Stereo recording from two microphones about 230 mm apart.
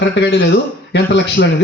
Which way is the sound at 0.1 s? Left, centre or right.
Left.